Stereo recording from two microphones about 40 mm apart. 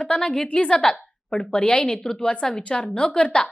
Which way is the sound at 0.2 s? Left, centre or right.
Centre.